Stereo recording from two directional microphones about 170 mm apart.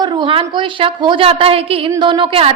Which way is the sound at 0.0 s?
30° right (ahead or behind).